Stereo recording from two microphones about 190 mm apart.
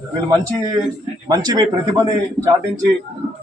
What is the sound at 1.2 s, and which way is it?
Speech, 20° right (ahead or behind).